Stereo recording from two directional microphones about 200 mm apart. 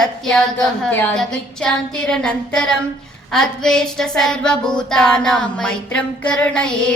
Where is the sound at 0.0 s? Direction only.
5° left (ahead or behind).